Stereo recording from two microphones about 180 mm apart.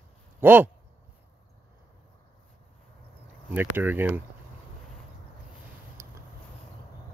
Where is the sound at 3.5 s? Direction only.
10° right (ahead or behind).